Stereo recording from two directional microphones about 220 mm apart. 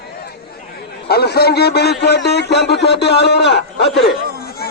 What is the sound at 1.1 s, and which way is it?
A man's voice, 45° left (ahead or behind).